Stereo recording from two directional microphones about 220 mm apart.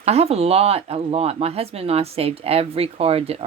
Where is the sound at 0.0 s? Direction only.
30° right (ahead or behind).